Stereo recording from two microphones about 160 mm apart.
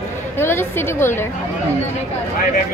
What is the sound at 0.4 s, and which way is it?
Speech, 15° left (ahead or behind).